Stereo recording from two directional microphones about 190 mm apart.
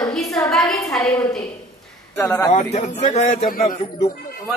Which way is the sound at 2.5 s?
35° left (ahead or behind).